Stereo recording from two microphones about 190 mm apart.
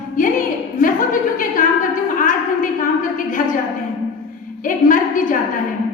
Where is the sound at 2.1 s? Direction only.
45° left (ahead or behind).